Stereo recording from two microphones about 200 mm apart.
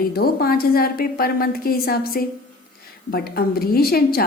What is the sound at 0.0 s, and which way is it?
A woman's voice, 50° left (ahead or behind).